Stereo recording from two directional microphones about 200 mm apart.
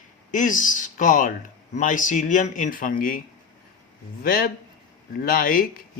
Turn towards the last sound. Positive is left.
turn(degrees=45)  # may be behind; listen again after turning